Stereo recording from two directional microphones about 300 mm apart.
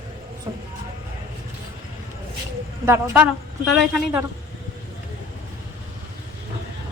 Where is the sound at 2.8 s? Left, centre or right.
Centre.